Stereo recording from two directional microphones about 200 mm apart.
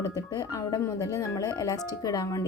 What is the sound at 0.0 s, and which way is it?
Speech, 15° left (ahead or behind).